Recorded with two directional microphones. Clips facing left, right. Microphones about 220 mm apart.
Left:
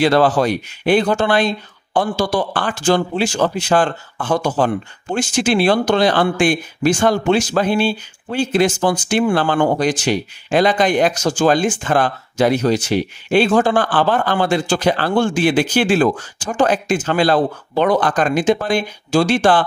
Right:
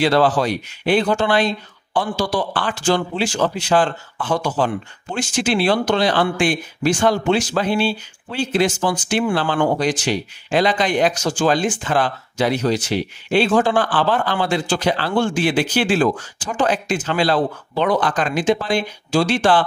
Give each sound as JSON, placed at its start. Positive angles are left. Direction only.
{"t": 0.0, "sound": "speech", "side_deg": 50}